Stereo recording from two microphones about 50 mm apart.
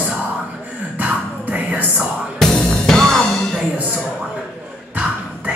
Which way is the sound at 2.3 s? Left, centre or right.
Centre.